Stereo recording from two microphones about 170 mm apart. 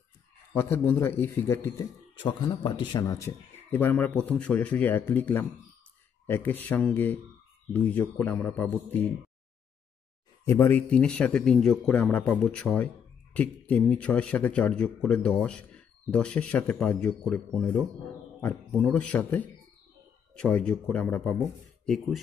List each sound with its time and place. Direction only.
0.6 s speech: 15° left (ahead or behind)
2.2 s speech: 30° left (ahead or behind); by 8.7 s 10° left (ahead or behind)
10.4 s speech: 15° left (ahead or behind)